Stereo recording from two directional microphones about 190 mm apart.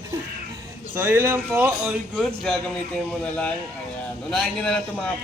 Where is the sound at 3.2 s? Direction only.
5° left (ahead or behind).